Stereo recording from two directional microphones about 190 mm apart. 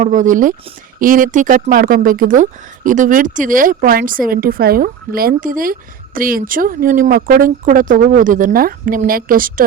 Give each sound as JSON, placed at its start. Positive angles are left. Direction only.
{"t": 0.0, "sound": "speech", "side_deg": -40}